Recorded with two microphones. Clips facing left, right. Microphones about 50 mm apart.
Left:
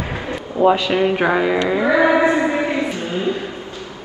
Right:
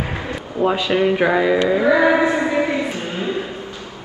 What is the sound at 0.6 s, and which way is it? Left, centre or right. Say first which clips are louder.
Speech: left 5 dB; centre.